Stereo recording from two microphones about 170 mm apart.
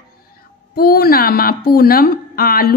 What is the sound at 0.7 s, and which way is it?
Speech, 65° left (ahead or behind).